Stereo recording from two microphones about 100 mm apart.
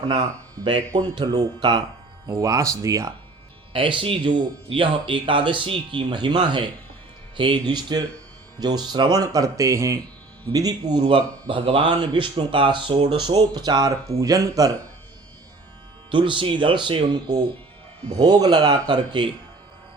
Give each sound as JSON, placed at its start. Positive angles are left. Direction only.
{"t": 0.6, "sound": "a man's voice", "side_deg": -60}
{"t": 2.2, "sound": "speech", "side_deg": -35}
{"t": 3.7, "sound": "a man's voice", "side_deg": -60}
{"t": 16.1, "sound": "a man's voice", "side_deg": -55}
{"t": 17.1, "sound": "speech", "side_deg": -40}